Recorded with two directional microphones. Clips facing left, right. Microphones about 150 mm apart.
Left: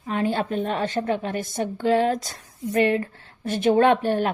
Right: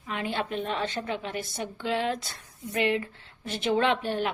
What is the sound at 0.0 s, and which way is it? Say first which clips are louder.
A woman's voice: left 7 dB; 40° left (ahead or behind).